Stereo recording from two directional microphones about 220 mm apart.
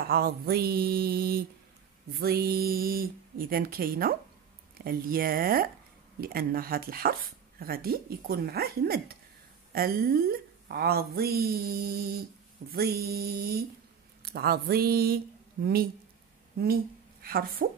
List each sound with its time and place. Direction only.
0.0 s speech: 45° right (ahead or behind)
17.2 s a woman's voice: 40° right (ahead or behind)